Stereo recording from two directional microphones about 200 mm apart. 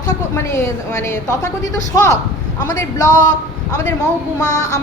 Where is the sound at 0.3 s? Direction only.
15° left (ahead or behind).